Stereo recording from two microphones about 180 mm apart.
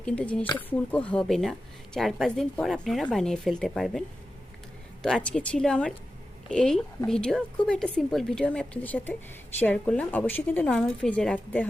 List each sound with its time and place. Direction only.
0.0 s a woman's voice: 5° left (ahead or behind)
5.0 s a woman's voice: 5° left (ahead or behind)